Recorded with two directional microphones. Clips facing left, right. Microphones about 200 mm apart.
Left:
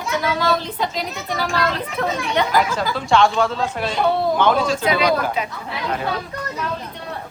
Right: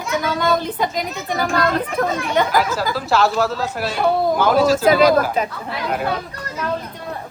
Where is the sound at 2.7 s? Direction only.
5° right (ahead or behind).